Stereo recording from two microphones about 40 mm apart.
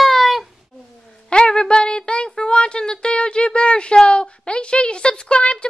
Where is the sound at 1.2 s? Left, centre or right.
Left.